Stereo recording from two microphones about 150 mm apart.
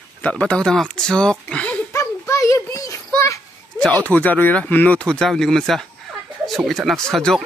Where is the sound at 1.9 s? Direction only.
20° left (ahead or behind).